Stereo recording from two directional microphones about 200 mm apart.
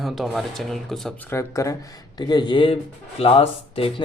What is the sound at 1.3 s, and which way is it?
Speech, 15° left (ahead or behind).